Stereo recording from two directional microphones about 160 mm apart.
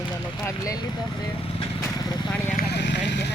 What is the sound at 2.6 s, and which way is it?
Vehicle, 90° left.